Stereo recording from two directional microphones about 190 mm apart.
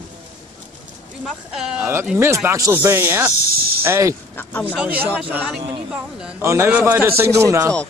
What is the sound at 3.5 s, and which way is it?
Snake, 50° right (ahead or behind).